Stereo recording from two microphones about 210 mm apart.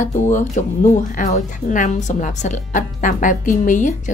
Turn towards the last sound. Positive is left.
turn(degrees=40)  # may be behind; listen again after turning